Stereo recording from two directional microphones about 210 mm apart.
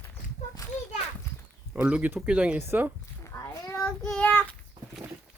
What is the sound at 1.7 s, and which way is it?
Speech, 5° right (ahead or behind).